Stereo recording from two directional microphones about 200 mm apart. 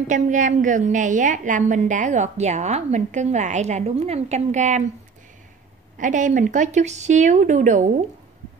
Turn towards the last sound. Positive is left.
turn(degrees=-40)  # may be behind; listen again after turning